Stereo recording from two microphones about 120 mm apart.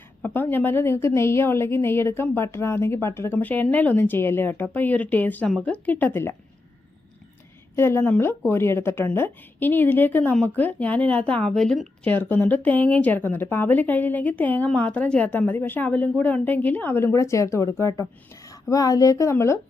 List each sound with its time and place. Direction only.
0.2 s a woman's voice: 15° left (ahead or behind)
7.8 s a woman's voice: 20° left (ahead or behind); by 12.1 s 5° left (ahead or behind)
12.1 s a woman's voice: 15° left (ahead or behind)